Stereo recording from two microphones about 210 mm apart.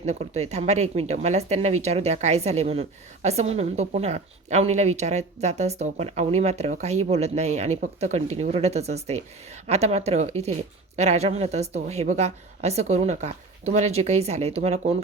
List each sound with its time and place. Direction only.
0.0 s a woman's voice: 30° right (ahead or behind)